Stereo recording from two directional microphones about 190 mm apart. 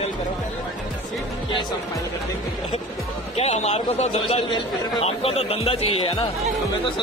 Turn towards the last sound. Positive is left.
turn(degrees=30)  # may be behind; listen again after turning